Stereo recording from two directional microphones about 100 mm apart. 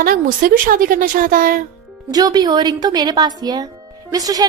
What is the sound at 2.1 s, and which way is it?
A woman's voice, 45° right (ahead or behind).